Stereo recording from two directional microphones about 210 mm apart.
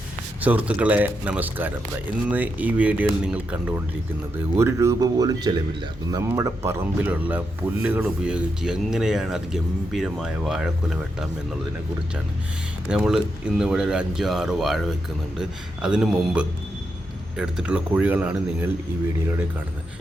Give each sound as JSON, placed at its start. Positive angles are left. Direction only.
{"t": 0.4, "sound": "speech", "side_deg": -5}
{"t": 12.9, "sound": "speech", "side_deg": -5}